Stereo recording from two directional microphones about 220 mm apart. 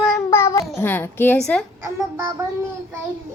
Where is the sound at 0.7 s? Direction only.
10° left (ahead or behind).